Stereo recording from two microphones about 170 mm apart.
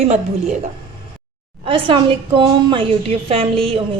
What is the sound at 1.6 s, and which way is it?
A woman's voice, 30° right (ahead or behind).